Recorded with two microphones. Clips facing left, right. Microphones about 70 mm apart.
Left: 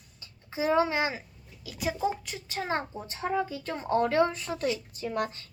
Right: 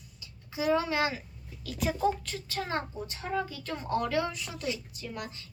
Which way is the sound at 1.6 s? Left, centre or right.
Centre.